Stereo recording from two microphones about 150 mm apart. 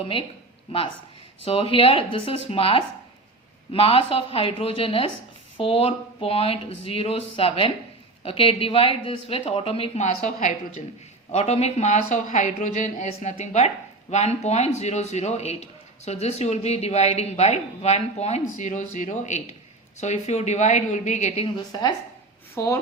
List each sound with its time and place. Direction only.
0.0 s speech: 35° left (ahead or behind)
1.5 s a man's voice: 40° left (ahead or behind)
21.7 s speech: 25° left (ahead or behind)